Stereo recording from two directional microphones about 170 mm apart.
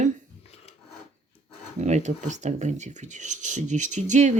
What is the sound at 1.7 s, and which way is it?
Speech, 45° right (ahead or behind).